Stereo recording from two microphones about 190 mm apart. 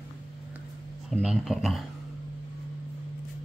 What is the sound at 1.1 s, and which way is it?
Speech, centre (ahead or behind).